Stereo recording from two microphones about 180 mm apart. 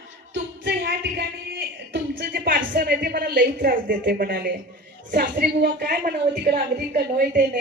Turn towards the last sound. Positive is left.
turn(degrees=-55)  # may be behind; listen again after turning